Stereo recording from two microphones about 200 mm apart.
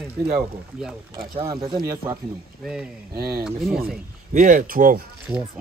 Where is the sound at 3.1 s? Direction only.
50° right (ahead or behind).